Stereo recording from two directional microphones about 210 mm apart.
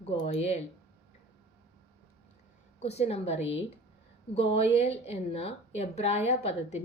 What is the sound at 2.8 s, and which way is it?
A woman's voice, 30° left (ahead or behind).